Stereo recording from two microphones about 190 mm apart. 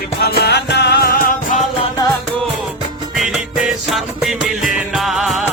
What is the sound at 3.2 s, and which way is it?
Music, 5° right (ahead or behind).